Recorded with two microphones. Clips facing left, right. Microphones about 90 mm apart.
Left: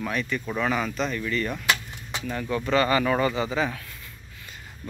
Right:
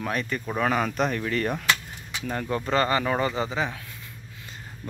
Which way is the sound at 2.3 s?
40° right (ahead or behind).